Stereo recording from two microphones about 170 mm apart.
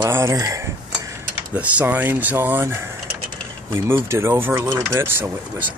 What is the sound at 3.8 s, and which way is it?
Speech, 15° right (ahead or behind).